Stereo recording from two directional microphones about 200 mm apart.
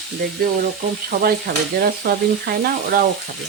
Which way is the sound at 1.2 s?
50° right (ahead or behind).